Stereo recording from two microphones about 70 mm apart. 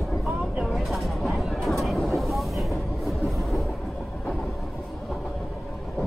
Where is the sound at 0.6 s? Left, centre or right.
Centre.